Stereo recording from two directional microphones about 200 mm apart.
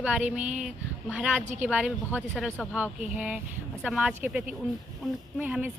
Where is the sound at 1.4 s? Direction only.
35° right (ahead or behind).